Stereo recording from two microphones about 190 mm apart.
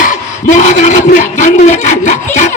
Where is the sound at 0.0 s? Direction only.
40° left (ahead or behind).